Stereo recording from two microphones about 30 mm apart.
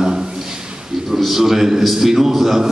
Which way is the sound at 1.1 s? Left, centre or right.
Centre.